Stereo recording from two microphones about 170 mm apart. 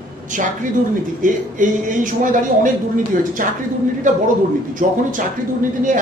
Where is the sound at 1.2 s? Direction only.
50° right (ahead or behind).